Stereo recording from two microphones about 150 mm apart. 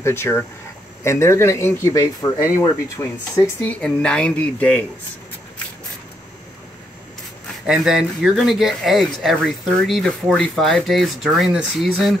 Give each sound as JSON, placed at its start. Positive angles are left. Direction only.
{"t": 0.0, "sound": "speech", "side_deg": 15}
{"t": 7.6, "sound": "speech", "side_deg": -5}